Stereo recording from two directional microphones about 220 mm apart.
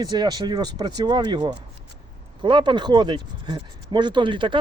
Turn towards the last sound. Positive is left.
turn(degrees=-20)  # may be behind; listen again after turning